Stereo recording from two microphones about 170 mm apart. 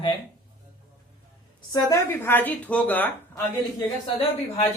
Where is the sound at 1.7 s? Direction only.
20° left (ahead or behind).